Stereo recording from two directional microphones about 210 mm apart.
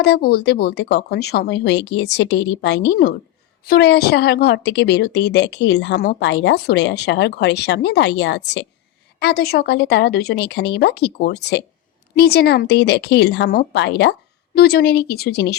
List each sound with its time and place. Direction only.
0.0 s a woman's voice: 50° left (ahead or behind)